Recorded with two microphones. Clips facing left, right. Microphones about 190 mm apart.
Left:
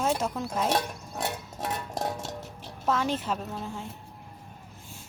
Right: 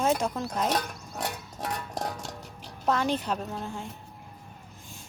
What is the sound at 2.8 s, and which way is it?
Speech, centre (ahead or behind).